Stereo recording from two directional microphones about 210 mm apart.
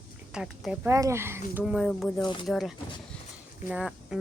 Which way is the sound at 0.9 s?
15° right (ahead or behind).